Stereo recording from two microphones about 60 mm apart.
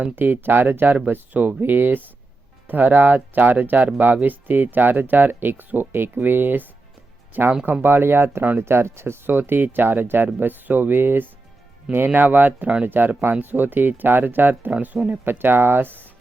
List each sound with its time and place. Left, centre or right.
0.0 s speech: right